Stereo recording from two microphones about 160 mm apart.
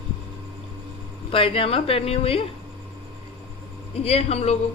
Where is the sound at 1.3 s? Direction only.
35° left (ahead or behind).